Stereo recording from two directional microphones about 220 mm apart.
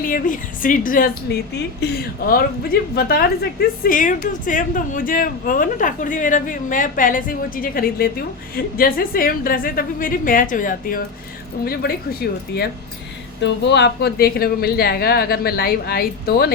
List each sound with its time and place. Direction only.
0.0 s a woman's voice: 40° left (ahead or behind)